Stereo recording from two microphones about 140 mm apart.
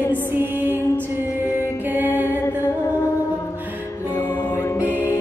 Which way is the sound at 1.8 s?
10° right (ahead or behind).